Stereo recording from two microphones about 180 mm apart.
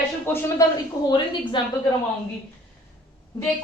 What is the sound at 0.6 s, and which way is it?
A woman's voice, 15° left (ahead or behind).